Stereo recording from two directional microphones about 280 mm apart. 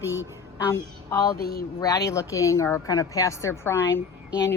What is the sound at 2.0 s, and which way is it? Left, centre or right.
A woman's voice, centre.